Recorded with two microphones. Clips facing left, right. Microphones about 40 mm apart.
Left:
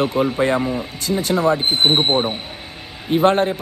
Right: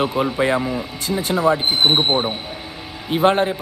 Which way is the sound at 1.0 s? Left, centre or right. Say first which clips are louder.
Even; right.